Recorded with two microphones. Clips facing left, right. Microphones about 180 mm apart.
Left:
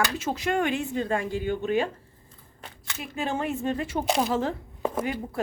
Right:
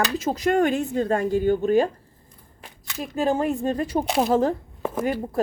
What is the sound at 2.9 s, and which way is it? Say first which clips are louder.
A woman's voice: right 7 dB; 40° right (ahead or behind).